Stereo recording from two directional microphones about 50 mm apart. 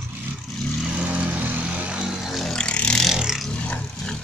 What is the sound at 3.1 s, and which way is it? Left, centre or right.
Vehicle, centre.